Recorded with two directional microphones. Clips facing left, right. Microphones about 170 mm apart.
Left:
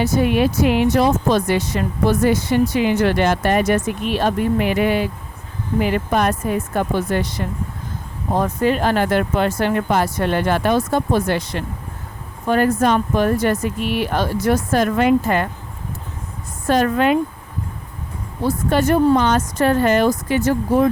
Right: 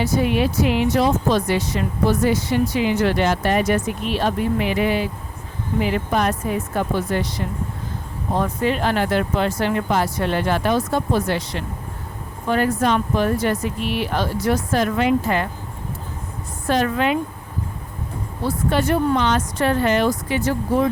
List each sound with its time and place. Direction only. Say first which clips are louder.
0.0 s speech: left 3 dB; 50° left (ahead or behind)
8.4 s speech: left 3 dB; 45° left (ahead or behind)
16.6 s speech: left 3 dB; 45° left (ahead or behind)
18.4 s speech: left 3 dB; 45° left (ahead or behind)